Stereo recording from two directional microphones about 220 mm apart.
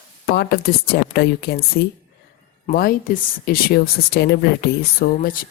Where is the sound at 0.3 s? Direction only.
45° left (ahead or behind).